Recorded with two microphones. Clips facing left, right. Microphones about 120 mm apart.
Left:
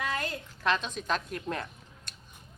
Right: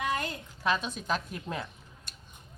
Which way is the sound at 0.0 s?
15° right (ahead or behind).